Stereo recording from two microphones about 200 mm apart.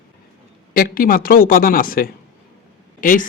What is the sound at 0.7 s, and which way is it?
Speech, 45° left (ahead or behind).